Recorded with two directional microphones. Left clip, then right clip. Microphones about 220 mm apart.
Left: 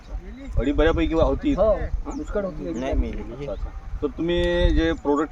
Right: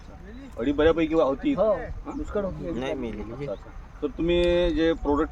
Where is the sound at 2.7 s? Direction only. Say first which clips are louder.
Left 2 dB; 45° right (ahead or behind).